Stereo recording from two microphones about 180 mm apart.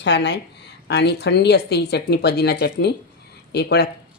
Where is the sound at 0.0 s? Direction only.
75° left (ahead or behind).